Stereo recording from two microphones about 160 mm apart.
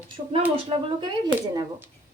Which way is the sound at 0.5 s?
35° right (ahead or behind).